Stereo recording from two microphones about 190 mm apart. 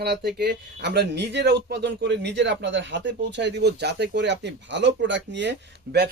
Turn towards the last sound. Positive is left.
turn(degrees=-65)  # may be behind; listen again after turning